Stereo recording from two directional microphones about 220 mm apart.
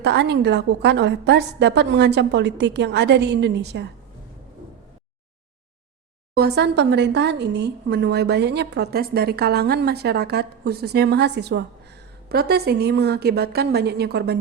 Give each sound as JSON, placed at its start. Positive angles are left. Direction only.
{"t": 0.0, "sound": "speech", "side_deg": -50}
{"t": 6.3, "sound": "speech", "side_deg": -50}